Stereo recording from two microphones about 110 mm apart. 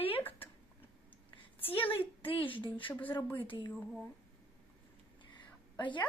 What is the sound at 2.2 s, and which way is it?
Speech, 55° left (ahead or behind).